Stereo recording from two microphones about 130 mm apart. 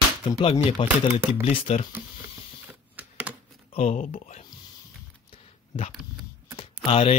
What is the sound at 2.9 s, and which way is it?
Computer keyboard, 15° right (ahead or behind).